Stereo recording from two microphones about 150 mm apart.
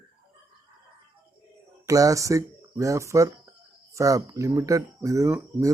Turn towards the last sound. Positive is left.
turn(degrees=-20)  # may be behind; listen again after turning